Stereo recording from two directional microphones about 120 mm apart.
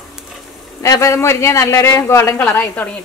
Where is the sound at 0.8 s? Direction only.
25° left (ahead or behind).